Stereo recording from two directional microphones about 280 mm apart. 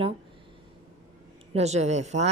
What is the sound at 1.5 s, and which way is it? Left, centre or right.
Speech, right.